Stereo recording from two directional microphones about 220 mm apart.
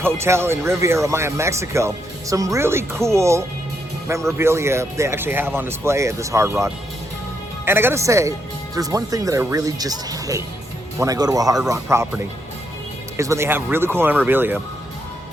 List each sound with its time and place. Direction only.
0.0 s speech: 10° right (ahead or behind)